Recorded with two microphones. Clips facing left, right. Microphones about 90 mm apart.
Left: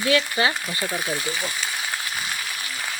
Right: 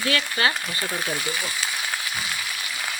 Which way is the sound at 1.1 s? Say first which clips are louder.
Left 1 dB; 25° left (ahead or behind).